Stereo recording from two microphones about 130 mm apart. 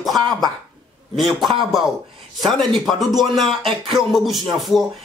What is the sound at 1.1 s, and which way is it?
Speech, centre (ahead or behind).